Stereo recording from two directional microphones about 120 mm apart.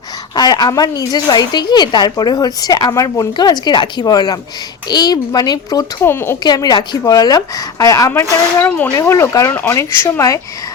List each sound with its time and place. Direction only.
0.3 s speech: 35° left (ahead or behind)
6.0 s a woman's voice: 20° left (ahead or behind)
6.4 s a woman's voice: 35° left (ahead or behind)